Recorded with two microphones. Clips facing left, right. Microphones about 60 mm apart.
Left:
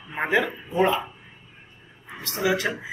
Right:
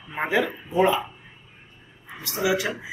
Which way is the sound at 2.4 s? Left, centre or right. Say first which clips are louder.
Even; centre.